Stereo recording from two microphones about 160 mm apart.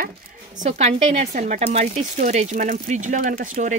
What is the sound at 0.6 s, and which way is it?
Speech, 45° right (ahead or behind).